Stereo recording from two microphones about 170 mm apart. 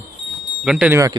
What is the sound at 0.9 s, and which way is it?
Speech, 20° right (ahead or behind).